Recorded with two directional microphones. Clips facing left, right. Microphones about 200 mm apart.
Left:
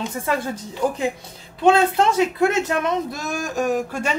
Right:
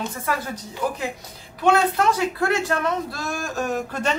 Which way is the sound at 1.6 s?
25° left (ahead or behind).